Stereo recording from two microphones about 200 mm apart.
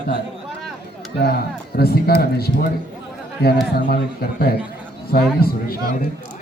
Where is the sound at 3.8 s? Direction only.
50° left (ahead or behind).